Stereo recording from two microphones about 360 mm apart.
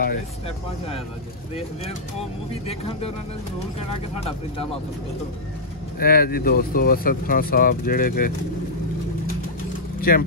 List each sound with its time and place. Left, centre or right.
2.6 s speech: centre
5.9 s speech: left
9.9 s vehicle: left